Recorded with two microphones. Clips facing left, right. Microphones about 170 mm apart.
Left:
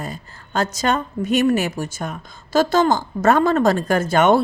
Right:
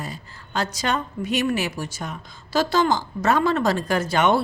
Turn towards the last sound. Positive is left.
turn(degrees=50)  # may be behind; listen again after turning